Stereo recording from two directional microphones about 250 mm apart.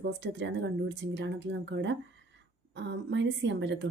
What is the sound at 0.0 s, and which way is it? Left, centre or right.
Speech, right.